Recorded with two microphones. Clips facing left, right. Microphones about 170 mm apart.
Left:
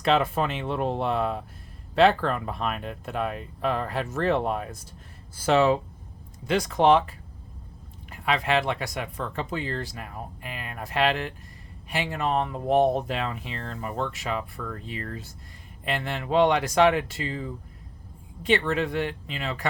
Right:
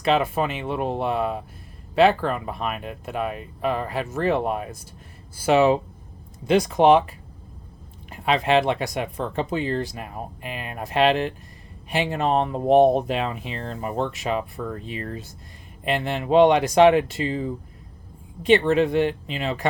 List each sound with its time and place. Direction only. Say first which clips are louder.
0.0 s speech: right 2 dB; 5° right (ahead or behind)
8.1 s speech: right 5 dB; 25° right (ahead or behind)